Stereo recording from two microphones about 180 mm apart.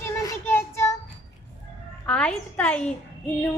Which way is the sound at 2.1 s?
5° left (ahead or behind).